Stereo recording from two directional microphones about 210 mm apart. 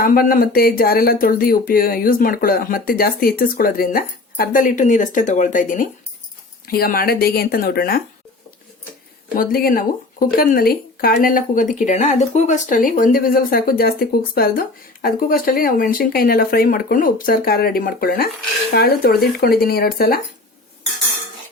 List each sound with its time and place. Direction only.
0.0 s speech: 45° left (ahead or behind)
9.3 s speech: 45° left (ahead or behind)